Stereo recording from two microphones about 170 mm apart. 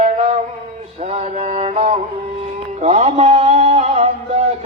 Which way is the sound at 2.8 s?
40° right (ahead or behind).